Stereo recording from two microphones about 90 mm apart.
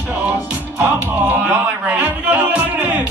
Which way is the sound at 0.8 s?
20° right (ahead or behind).